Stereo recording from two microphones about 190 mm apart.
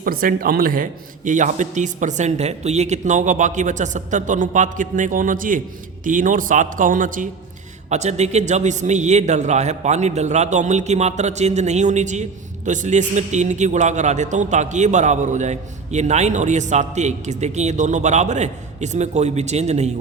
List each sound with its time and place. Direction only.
0.0 s a man's voice: 50° right (ahead or behind)